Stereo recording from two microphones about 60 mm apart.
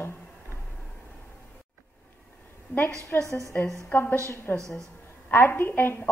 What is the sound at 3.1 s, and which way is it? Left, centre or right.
Speech, left.